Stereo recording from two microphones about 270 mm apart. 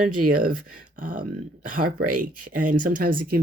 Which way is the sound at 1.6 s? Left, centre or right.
Right.